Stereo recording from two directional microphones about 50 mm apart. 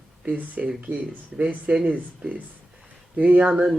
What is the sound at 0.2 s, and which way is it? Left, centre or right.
Speech, right.